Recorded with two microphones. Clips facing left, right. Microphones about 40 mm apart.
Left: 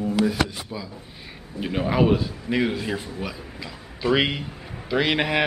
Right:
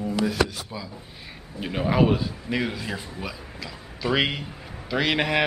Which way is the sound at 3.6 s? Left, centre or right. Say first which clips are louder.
Left 1 dB; centre.